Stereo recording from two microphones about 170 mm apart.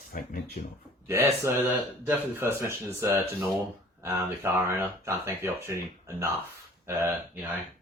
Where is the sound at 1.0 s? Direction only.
15° right (ahead or behind).